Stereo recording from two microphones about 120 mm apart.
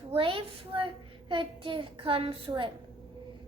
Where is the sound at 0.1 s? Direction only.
50° right (ahead or behind).